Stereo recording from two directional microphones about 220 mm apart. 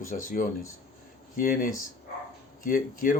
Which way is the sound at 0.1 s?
35° left (ahead or behind).